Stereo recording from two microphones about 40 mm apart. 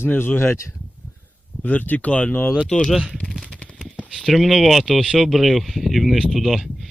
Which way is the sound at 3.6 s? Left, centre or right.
Left.